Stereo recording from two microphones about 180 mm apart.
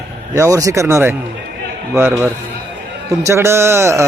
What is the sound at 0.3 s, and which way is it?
A man's voice, 15° right (ahead or behind).